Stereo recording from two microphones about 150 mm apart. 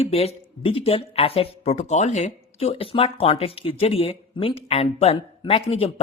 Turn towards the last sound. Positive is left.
turn(degrees=45)  # may be behind; listen again after turning